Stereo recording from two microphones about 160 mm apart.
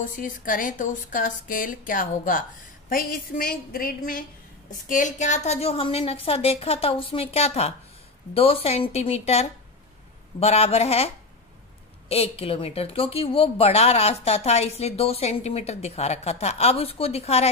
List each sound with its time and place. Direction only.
0.0 s speech: 55° left (ahead or behind)
4.8 s speech: 50° left (ahead or behind)
12.1 s speech: 40° left (ahead or behind)